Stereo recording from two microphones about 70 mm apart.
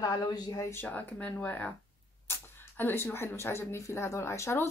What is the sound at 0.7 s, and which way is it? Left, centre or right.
Speech, left.